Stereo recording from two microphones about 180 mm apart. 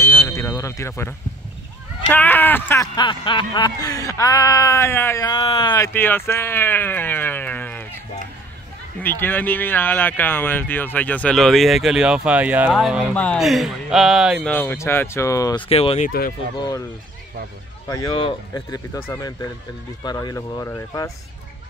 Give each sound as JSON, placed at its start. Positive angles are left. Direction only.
{"t": 0.0, "sound": "a sound", "side_deg": 15}
{"t": 2.0, "sound": "speech", "side_deg": 10}
{"t": 3.0, "sound": "speech", "side_deg": 25}
{"t": 5.3, "sound": "speech", "side_deg": 30}
{"t": 5.9, "sound": "speech", "side_deg": 10}
{"t": 9.0, "sound": "speech", "side_deg": 10}
{"t": 15.7, "sound": "speech", "side_deg": 35}
{"t": 16.1, "sound": "speech", "side_deg": 55}
{"t": 17.8, "sound": "speech", "side_deg": 25}
{"t": 18.5, "sound": "speech", "side_deg": 15}